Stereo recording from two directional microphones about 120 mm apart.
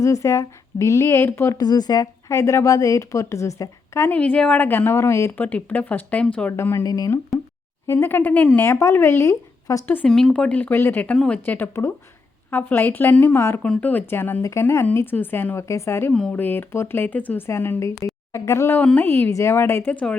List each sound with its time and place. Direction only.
0.0 s speech: 25° left (ahead or behind)
1.6 s speech: 35° left (ahead or behind)
4.1 s a woman's voice: 10° left (ahead or behind)
6.6 s speech: 20° left (ahead or behind)
7.9 s a woman's voice: 15° left (ahead or behind)
10.1 s a woman's voice: 5° left (ahead or behind)